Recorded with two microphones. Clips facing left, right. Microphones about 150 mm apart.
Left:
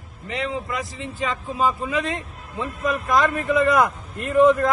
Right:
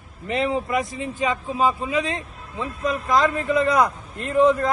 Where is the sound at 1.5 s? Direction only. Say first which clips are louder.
Left 1 dB; centre (ahead or behind).